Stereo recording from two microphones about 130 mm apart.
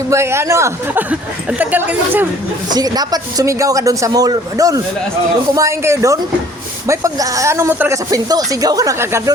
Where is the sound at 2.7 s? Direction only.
30° right (ahead or behind).